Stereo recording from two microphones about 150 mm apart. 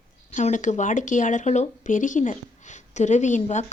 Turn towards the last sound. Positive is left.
turn(degrees=55)  # may be behind; listen again after turning